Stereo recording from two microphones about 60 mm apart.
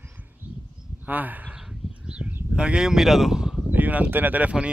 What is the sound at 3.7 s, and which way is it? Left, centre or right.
Speech, right.